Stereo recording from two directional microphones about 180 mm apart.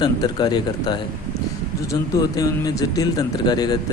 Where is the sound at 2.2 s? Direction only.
20° left (ahead or behind).